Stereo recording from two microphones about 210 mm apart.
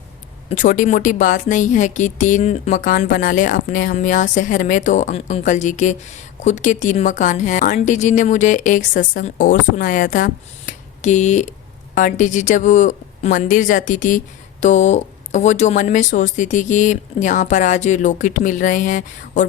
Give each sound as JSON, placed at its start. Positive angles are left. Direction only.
{"t": 0.5, "sound": "speech", "side_deg": 40}